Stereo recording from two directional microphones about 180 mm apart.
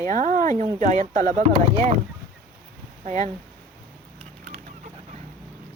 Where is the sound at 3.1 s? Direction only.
40° right (ahead or behind).